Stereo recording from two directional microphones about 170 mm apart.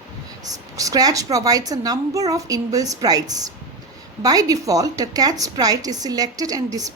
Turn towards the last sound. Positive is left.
turn(degrees=-20)  # may be behind; listen again after turning